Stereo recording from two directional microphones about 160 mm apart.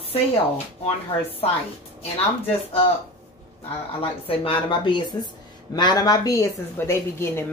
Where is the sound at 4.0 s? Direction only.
35° left (ahead or behind).